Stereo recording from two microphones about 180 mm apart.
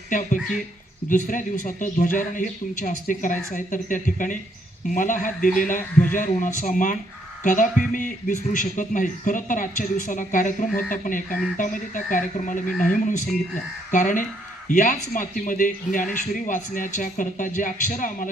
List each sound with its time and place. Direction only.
0.1 s speech: 45° left (ahead or behind)